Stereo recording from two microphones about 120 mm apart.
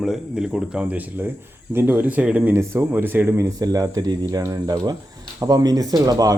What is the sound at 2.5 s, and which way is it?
Speech, 20° right (ahead or behind).